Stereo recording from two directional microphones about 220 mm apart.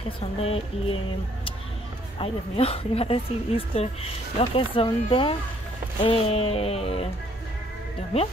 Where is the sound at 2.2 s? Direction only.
25° left (ahead or behind).